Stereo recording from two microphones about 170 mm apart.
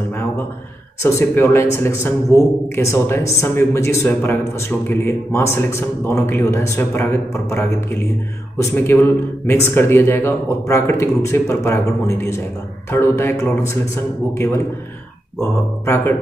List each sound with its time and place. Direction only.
1.0 s speech: 15° left (ahead or behind)
15.8 s speech: 15° left (ahead or behind)